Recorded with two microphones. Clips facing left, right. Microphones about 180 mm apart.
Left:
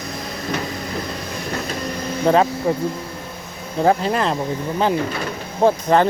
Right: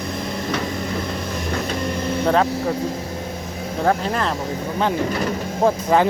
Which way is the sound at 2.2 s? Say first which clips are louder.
Left 3 dB; 10° left (ahead or behind).